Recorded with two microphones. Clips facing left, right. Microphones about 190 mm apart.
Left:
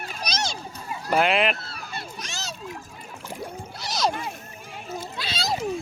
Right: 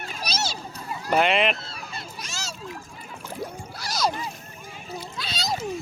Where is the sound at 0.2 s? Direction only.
5° right (ahead or behind).